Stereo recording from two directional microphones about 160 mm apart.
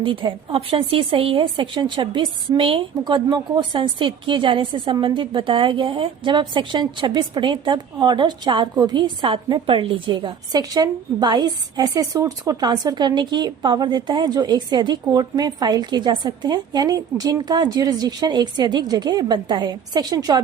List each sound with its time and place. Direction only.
0.0 s a woman's voice: 30° right (ahead or behind)